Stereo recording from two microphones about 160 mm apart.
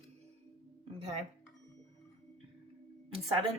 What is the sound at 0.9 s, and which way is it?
Speech, 40° right (ahead or behind).